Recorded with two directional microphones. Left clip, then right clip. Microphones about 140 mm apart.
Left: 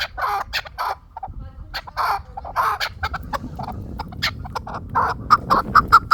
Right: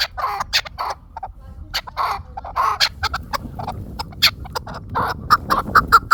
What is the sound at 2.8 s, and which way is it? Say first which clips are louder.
Chicken: right 6 dB; 35° right (ahead or behind).